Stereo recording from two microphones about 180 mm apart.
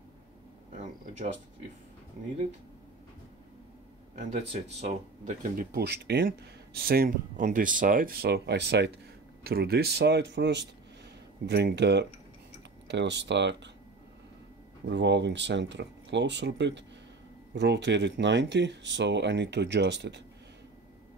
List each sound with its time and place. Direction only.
4.1 s speech: 40° right (ahead or behind); by 13.6 s 75° right (ahead or behind)
14.9 s speech: 75° right (ahead or behind)